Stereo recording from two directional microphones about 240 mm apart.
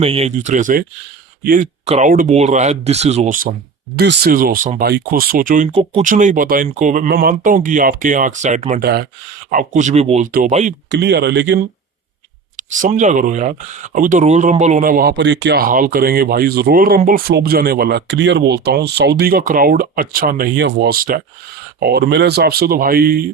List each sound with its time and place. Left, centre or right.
0.0 s speech: right
3.9 s speech: right
10.9 s speech: right
12.5 s speech: right